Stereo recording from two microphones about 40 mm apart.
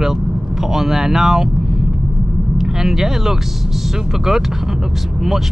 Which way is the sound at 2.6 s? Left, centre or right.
Centre.